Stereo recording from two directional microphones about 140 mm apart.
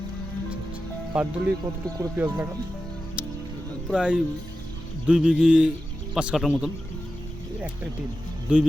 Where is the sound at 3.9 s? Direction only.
10° right (ahead or behind).